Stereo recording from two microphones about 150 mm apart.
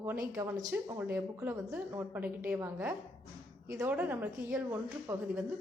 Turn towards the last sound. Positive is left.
turn(degrees=-15)  # may be behind; listen again after turning